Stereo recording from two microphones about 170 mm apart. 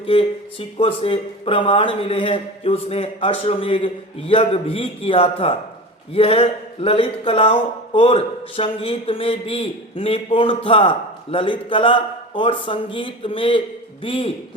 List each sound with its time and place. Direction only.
0.0 s speech: 35° left (ahead or behind)